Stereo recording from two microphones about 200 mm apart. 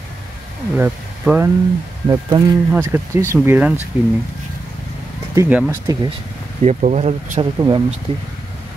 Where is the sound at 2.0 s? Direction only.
20° right (ahead or behind); by 4.1 s 5° right (ahead or behind).